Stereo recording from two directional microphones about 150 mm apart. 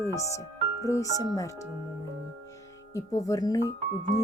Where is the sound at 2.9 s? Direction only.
25° left (ahead or behind).